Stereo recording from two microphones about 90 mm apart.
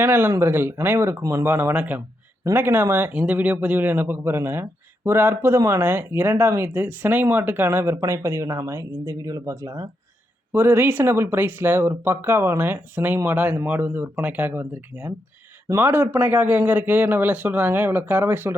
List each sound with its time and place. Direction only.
0.0 s speech: 25° right (ahead or behind); by 9.8 s 40° right (ahead or behind)
10.5 s speech: 25° right (ahead or behind)